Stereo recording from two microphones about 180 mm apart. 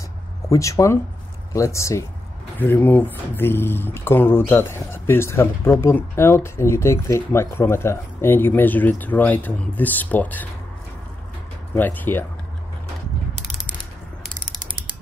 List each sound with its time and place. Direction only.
0.5 s speech: 15° left (ahead or behind)
11.7 s speech: 10° left (ahead or behind)